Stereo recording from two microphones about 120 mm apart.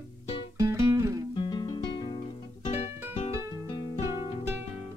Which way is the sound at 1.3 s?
40° left (ahead or behind).